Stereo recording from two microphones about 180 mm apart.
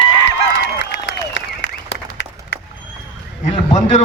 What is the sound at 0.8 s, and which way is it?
Applause, 80° left.